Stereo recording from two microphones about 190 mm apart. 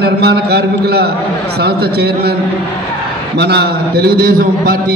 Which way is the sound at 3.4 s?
60° right (ahead or behind).